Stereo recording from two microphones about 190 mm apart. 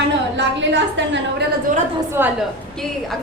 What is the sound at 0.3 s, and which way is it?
A woman's voice, 70° right (ahead or behind).